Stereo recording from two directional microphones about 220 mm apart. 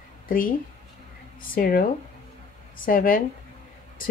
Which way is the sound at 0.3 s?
40° left (ahead or behind).